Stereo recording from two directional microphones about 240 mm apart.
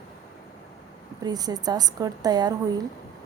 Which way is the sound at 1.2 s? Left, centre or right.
Centre.